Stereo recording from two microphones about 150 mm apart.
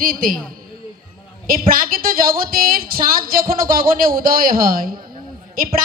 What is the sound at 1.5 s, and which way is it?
A woman's voice, 70° right (ahead or behind).